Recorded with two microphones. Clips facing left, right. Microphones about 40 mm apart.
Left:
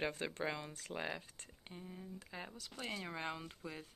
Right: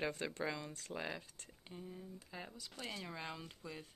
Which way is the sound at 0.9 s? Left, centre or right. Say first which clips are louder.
Left 1 dB; left.